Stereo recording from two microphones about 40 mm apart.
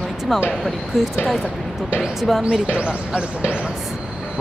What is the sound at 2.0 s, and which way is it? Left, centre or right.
Speech, centre.